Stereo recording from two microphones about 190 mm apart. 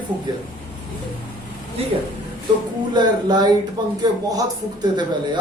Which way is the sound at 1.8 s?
30° right (ahead or behind).